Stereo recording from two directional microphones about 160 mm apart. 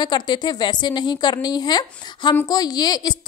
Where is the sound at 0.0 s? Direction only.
30° left (ahead or behind).